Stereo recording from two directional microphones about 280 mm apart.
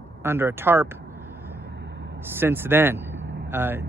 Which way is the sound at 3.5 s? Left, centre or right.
Centre.